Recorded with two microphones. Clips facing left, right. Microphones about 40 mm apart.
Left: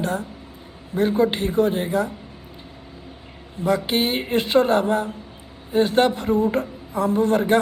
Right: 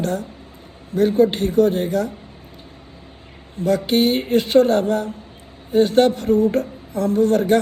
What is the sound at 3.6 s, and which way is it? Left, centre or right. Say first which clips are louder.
Speech: right 3 dB; left.